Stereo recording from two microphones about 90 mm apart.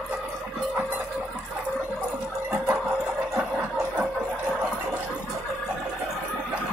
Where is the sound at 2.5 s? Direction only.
25° right (ahead or behind).